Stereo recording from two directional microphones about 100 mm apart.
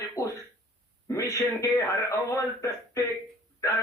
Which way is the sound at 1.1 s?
30° left (ahead or behind).